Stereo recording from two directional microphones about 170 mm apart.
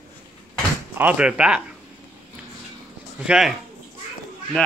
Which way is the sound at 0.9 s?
10° right (ahead or behind).